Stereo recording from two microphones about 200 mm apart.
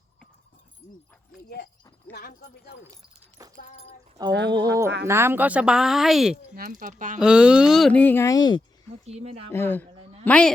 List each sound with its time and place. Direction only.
0.8 s dog: 10° left (ahead or behind)
1.5 s speech: 50° left (ahead or behind)
2.9 s keys jangling: 15° right (ahead or behind)
4.2 s speech: 20° right (ahead or behind); by 6.3 s centre (ahead or behind)
6.6 s speech: 45° right (ahead or behind)
7.2 s speech: 5° right (ahead or behind); by 8.6 s 20° left (ahead or behind)
9.0 s speech: 30° right (ahead or behind)
9.5 s speech: 10° left (ahead or behind)